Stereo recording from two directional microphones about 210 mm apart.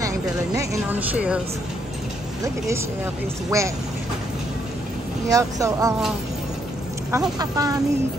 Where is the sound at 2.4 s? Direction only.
15° right (ahead or behind).